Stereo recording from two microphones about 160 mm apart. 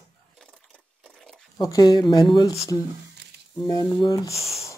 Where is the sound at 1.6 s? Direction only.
20° left (ahead or behind).